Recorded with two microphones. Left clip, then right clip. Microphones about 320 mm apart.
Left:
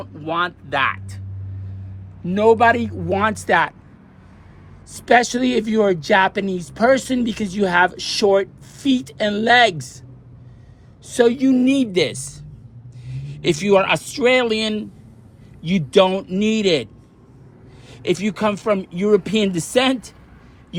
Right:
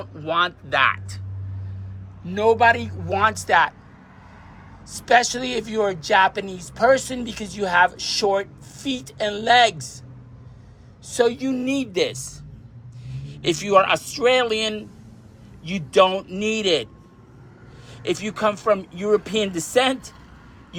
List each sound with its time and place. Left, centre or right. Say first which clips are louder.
0.0 s speech: even; centre
2.2 s a man's voice: left 3 dB; centre
4.9 s a man's voice: left 2 dB; left
11.0 s a man's voice: left 4 dB; left
13.1 s vehicle: left 3 dB; left
13.7 s speech: left 1 dB; left
14.3 s a man's voice: left 2 dB; left
16.5 s a man's voice: left 2 dB; left
18.0 s speech: left 2 dB; left